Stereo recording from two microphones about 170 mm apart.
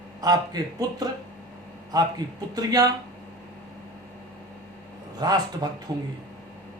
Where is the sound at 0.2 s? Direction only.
25° right (ahead or behind).